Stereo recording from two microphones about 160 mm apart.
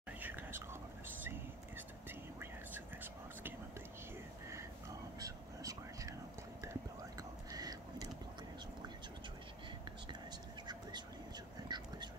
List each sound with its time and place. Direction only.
0.2 s whispering: 10° right (ahead or behind)
2.7 s whispering: 10° right (ahead or behind)
5.2 s whispering: 20° right (ahead or behind)
11.7 s a sound: 25° right (ahead or behind)